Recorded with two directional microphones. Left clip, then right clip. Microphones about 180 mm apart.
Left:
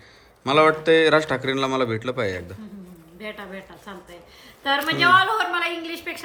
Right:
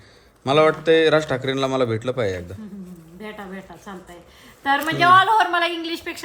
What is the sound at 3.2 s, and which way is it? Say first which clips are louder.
Speech: even; centre (ahead or behind).